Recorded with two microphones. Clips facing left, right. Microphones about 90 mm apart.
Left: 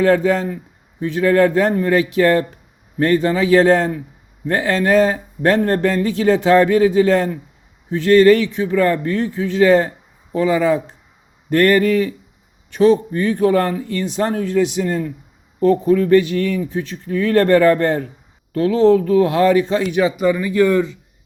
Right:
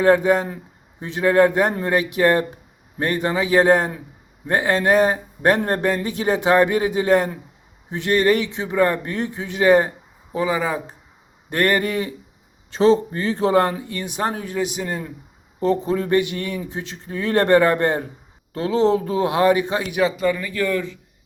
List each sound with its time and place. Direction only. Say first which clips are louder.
0.0 s a man's voice: left 1 dB; 15° right (ahead or behind)
12.7 s a man's voice: left 3 dB; 30° right (ahead or behind); by 20.1 s 10° right (ahead or behind)
20.1 s speech: left 4 dB; 15° left (ahead or behind)